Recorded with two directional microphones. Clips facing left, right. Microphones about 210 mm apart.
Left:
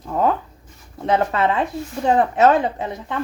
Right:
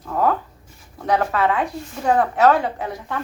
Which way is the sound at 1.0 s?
25° left (ahead or behind).